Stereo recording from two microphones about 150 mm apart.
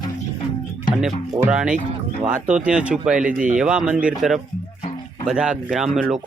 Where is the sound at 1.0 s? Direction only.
5° right (ahead or behind).